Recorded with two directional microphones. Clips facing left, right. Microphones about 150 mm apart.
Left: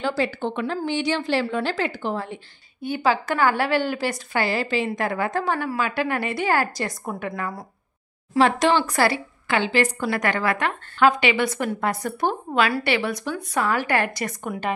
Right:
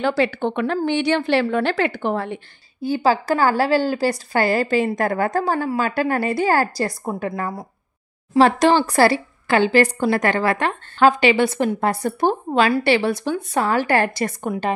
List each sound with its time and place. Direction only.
0.0 s a woman's voice: 70° right (ahead or behind)
2.8 s speech: 35° right (ahead or behind)